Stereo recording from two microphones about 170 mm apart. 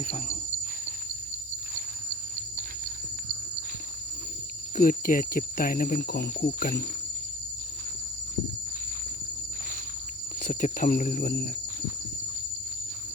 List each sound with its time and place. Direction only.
0.0 s cricket: 40° left (ahead or behind)
4.8 s speech: 55° left (ahead or behind)
10.4 s speech: 50° left (ahead or behind)